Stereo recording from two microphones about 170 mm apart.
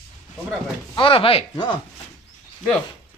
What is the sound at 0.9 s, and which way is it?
Speech, 30° left (ahead or behind).